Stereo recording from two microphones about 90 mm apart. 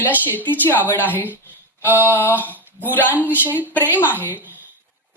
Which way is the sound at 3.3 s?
20° right (ahead or behind).